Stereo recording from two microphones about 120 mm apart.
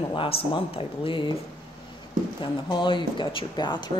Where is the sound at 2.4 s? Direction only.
40° left (ahead or behind).